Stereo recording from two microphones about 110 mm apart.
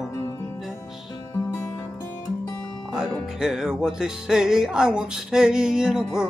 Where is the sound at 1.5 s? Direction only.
25° left (ahead or behind).